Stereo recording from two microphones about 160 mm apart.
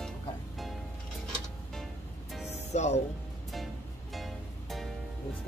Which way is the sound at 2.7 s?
45° left (ahead or behind).